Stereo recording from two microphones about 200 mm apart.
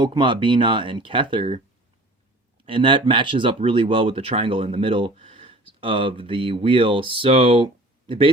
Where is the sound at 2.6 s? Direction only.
25° right (ahead or behind).